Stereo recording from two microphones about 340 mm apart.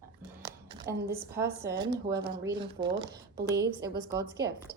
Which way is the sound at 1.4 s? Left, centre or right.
Centre.